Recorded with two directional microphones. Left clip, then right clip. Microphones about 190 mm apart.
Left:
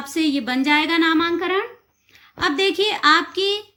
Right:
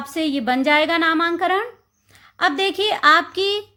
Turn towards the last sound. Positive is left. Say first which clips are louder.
# right 1 dB
turn(degrees=-50)  # may be behind; listen again after turning